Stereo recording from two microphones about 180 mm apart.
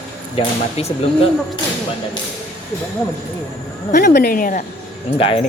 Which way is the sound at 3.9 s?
45° left (ahead or behind).